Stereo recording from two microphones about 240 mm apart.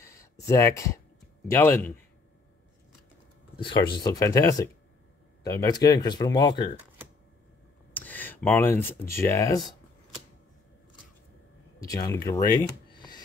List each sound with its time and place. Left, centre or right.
0.0 s a sound: centre
1.5 s speech: centre
3.5 s speech: centre
7.9 s speech: centre
11.8 s speech: centre